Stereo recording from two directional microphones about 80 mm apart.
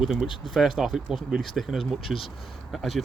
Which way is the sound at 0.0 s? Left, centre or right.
Centre.